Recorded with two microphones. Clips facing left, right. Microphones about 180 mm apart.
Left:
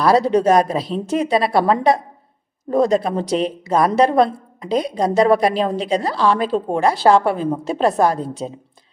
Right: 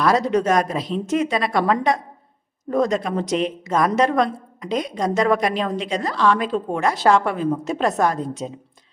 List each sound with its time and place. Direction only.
0.0 s a woman's voice: 30° left (ahead or behind)